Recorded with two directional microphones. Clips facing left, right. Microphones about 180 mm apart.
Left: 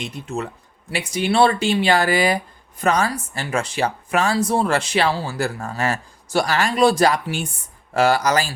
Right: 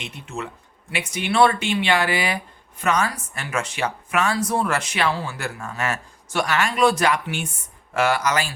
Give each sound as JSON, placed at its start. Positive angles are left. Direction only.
{"t": 0.0, "sound": "speech", "side_deg": 35}